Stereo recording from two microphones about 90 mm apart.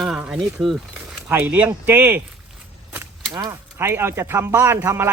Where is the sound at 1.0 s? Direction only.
20° right (ahead or behind).